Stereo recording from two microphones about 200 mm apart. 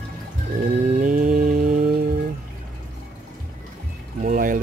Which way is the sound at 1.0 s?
40° right (ahead or behind).